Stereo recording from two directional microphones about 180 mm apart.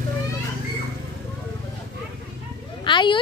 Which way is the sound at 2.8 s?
25° left (ahead or behind).